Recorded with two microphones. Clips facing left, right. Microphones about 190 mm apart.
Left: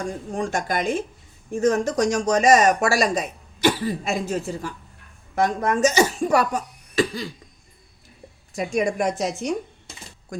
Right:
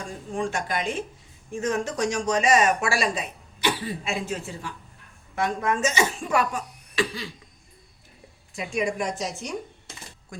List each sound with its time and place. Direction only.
0.3 s speech: 40° left (ahead or behind)
8.5 s speech: 45° left (ahead or behind)